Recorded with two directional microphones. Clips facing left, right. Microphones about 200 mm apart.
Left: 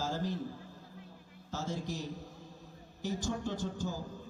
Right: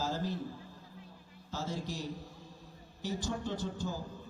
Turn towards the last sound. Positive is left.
turn(degrees=45)  # may be behind; listen again after turning